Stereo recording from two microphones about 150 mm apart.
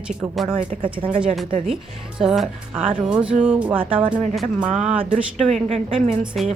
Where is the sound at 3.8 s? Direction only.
35° right (ahead or behind).